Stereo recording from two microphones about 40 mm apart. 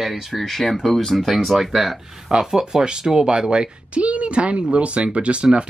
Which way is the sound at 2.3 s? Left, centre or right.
Centre.